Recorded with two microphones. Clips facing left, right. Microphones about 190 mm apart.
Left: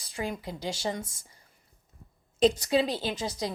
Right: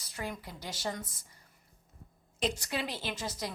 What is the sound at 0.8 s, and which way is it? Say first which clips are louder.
Speech: left 2 dB; 25° left (ahead or behind).